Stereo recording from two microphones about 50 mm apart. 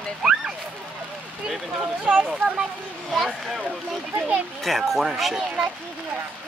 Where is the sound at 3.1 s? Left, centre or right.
Centre.